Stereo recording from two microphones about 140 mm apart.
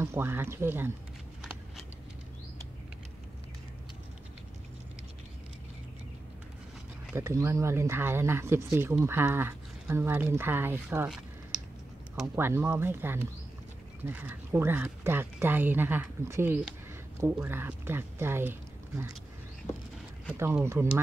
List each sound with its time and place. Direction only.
0.0 s speech: 15° right (ahead or behind)
7.2 s speech: 20° right (ahead or behind)
12.4 s speech: 15° right (ahead or behind)
20.3 s speech: 20° right (ahead or behind)